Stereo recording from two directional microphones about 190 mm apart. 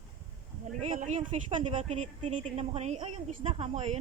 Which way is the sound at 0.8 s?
40° right (ahead or behind).